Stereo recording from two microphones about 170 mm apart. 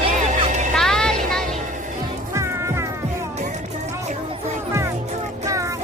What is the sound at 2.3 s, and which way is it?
Music, 15° right (ahead or behind).